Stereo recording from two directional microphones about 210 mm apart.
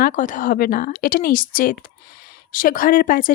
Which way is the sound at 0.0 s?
40° left (ahead or behind).